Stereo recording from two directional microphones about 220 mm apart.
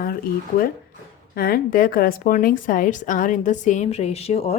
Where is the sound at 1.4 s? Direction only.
45° left (ahead or behind).